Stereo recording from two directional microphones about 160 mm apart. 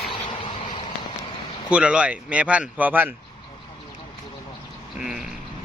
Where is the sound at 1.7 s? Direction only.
5° right (ahead or behind).